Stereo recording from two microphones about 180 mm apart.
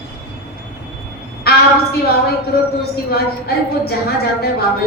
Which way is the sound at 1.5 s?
60° left (ahead or behind).